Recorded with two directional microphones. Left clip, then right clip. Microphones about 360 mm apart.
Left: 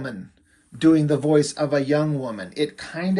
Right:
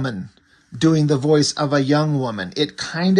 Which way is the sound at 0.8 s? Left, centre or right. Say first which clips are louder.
Even; centre.